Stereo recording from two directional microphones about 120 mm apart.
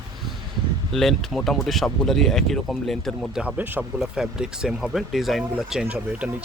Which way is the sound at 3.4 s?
10° right (ahead or behind).